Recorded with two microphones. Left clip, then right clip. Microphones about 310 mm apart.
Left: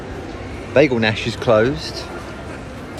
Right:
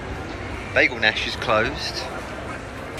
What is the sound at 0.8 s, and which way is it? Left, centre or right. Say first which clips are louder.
Speech: left 2 dB; centre.